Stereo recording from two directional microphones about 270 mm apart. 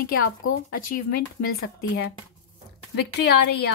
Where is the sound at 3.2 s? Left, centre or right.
Left.